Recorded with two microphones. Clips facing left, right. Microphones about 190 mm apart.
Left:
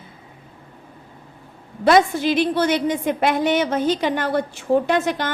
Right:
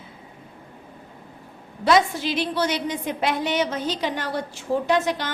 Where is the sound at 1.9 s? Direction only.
50° left (ahead or behind).